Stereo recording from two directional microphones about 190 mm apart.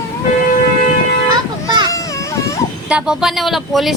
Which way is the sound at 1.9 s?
15° left (ahead or behind).